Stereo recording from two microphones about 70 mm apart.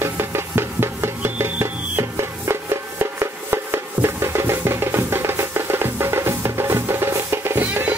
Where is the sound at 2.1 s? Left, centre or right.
Right.